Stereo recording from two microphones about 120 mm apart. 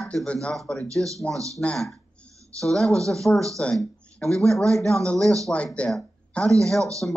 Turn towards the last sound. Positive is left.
turn(degrees=5)  # may be behind; listen again after turning